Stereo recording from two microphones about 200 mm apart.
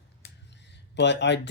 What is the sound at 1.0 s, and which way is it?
Speech, 60° left (ahead or behind).